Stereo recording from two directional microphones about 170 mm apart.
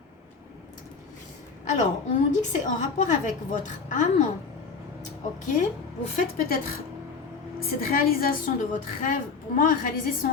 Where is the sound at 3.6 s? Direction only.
45° left (ahead or behind).